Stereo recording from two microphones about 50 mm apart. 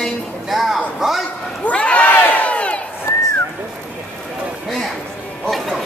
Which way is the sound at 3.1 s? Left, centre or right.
Left.